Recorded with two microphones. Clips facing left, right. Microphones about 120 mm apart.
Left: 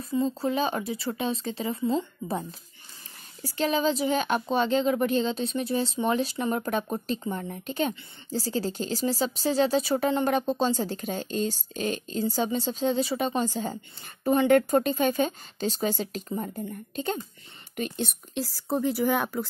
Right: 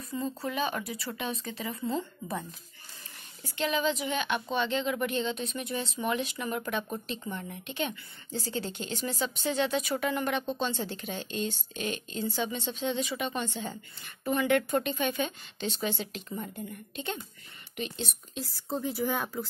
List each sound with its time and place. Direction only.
0.1 s speech: 25° left (ahead or behind)
3.4 s a woman's voice: 35° left (ahead or behind)
17.7 s speech: 50° left (ahead or behind); by 19.4 s 85° left